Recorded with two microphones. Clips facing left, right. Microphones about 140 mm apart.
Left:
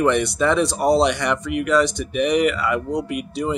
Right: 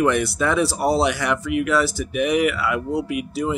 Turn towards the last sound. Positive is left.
turn(degrees=0)  # may be behind; listen again after turning